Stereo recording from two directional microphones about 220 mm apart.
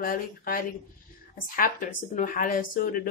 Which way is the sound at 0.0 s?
40° left (ahead or behind).